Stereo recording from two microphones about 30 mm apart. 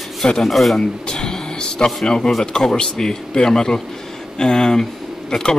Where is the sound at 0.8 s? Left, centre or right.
Left.